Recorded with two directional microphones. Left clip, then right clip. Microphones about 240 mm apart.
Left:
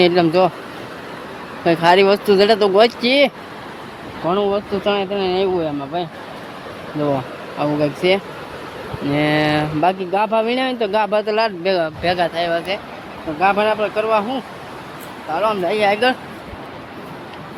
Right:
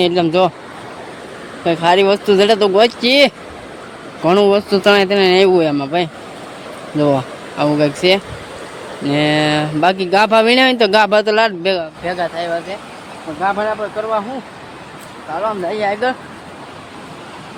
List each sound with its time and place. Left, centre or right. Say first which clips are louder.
0.0 s speech: even; centre
1.6 s speech: even; centre
4.3 s speech: right 7 dB; right
7.6 s speech: right 4 dB; centre
12.1 s speech: right 2 dB; centre
15.4 s speech: left 1 dB; centre